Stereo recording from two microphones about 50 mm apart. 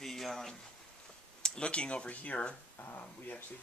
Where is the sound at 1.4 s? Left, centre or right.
Centre.